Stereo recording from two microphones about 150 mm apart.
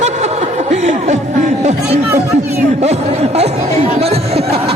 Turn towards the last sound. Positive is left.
turn(degrees=-40)  # may be behind; listen again after turning